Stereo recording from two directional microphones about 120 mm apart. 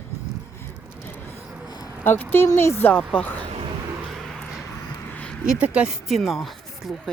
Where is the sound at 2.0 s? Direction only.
15° left (ahead or behind).